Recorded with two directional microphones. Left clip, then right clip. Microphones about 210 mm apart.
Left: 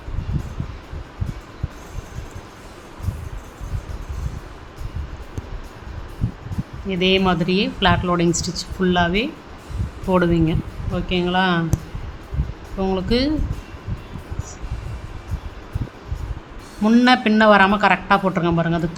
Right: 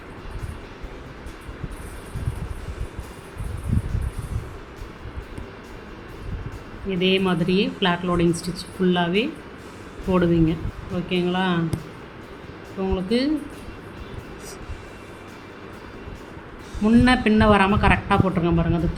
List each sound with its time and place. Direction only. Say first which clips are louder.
6.8 s speech: left 3 dB; 30° left (ahead or behind)
12.8 s speech: left 3 dB; 30° left (ahead or behind)
16.8 s speech: left 3 dB; 25° left (ahead or behind)